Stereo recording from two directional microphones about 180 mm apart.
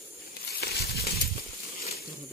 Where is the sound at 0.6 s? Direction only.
60° left (ahead or behind).